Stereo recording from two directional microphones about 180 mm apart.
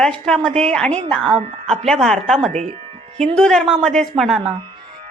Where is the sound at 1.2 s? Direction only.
30° right (ahead or behind).